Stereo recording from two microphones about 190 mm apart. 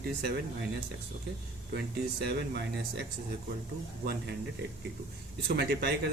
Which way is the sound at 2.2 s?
60° right (ahead or behind).